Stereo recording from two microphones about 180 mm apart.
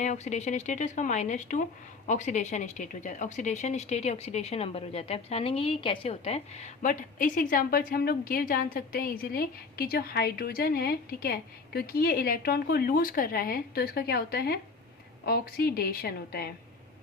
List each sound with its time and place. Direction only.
0.0 s a woman's voice: 40° left (ahead or behind); by 16.5 s 60° left (ahead or behind)